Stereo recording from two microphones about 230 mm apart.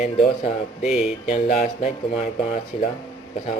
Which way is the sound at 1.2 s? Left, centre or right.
Left.